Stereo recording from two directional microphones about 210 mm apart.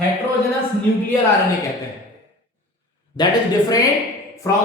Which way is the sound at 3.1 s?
20° left (ahead or behind).